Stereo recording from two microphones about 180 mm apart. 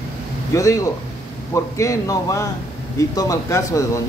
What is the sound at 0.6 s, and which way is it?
Speech, 20° left (ahead or behind).